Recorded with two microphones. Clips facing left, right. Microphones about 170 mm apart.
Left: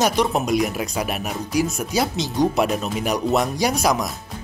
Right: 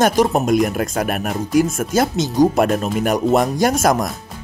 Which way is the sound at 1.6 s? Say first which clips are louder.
Right 5 dB; 50° right (ahead or behind).